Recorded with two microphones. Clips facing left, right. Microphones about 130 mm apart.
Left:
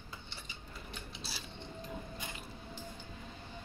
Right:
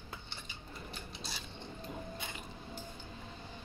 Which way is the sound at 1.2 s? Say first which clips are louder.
Right 1 dB; 5° left (ahead or behind).